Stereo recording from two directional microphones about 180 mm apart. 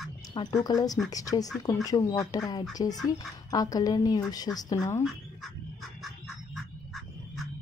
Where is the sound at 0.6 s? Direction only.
20° left (ahead or behind).